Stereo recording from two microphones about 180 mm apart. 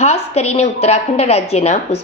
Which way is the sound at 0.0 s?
35° left (ahead or behind).